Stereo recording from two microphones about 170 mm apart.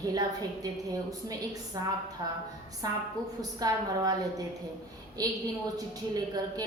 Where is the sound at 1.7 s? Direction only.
20° right (ahead or behind).